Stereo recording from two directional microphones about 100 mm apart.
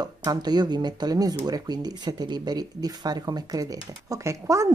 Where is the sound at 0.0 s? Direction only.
45° right (ahead or behind).